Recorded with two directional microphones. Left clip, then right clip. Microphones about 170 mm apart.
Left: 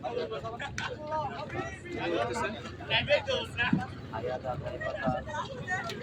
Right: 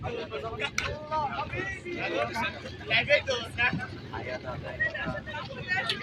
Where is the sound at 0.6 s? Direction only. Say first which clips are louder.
Right 4 dB; 70° left (ahead or behind).